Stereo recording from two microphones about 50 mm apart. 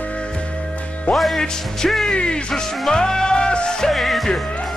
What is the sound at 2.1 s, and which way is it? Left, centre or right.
Music, left.